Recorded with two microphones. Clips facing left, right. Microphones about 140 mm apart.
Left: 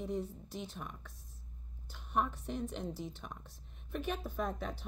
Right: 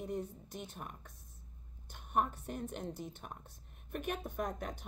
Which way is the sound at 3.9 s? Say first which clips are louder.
Left 1 dB; 55° right (ahead or behind).